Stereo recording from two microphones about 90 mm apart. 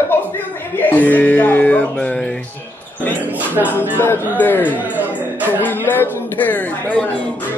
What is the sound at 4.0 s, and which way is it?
Speech, 25° left (ahead or behind).